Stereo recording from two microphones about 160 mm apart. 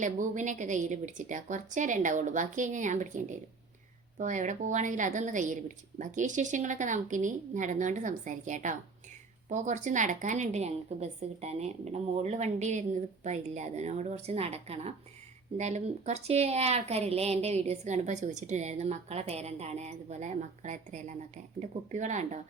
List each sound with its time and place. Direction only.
0.0 s speech: 50° right (ahead or behind)